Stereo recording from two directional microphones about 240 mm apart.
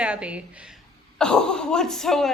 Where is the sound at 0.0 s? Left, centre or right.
Centre.